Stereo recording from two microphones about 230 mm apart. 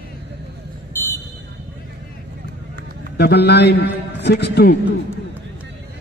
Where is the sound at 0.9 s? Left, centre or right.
Centre.